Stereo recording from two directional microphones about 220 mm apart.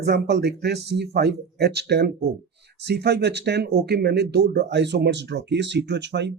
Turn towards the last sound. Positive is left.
turn(degrees=-50)  # may be behind; listen again after turning